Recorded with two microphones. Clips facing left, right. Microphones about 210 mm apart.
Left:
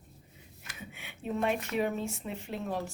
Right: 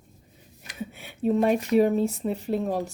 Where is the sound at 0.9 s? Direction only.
35° right (ahead or behind).